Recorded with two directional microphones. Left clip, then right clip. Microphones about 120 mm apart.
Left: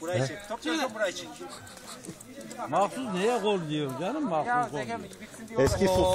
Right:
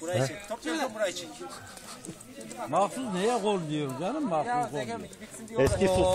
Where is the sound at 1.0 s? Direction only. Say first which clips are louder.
Even; 10° right (ahead or behind).